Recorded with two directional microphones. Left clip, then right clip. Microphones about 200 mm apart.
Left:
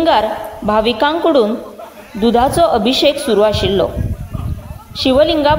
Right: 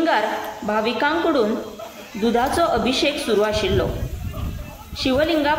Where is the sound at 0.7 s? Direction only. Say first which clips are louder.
Left 7 dB; 35° left (ahead or behind).